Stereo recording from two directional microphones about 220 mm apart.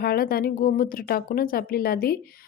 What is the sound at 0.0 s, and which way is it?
Speech, 45° left (ahead or behind).